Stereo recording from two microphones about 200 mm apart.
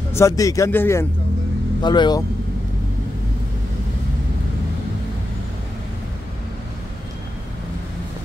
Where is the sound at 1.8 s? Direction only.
20° left (ahead or behind).